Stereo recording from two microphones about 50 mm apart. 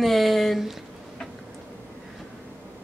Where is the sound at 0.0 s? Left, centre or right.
Centre.